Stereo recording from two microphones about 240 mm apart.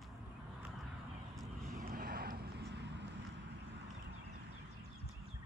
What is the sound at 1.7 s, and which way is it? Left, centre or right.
Vehicle, right.